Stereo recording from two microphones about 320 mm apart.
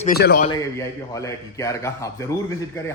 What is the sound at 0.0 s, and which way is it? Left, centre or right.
Speech, left.